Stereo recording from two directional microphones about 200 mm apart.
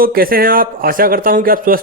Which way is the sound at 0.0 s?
45° right (ahead or behind).